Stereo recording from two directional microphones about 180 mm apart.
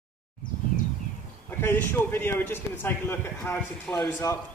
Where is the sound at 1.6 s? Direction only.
10° left (ahead or behind).